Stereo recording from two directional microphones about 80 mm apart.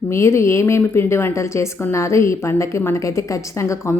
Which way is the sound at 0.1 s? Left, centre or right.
Left.